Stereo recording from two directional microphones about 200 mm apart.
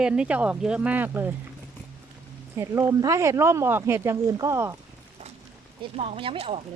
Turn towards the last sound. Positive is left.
turn(degrees=-30)  # may be behind; listen again after turning